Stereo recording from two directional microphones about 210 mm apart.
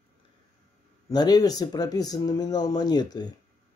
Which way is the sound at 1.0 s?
20° left (ahead or behind).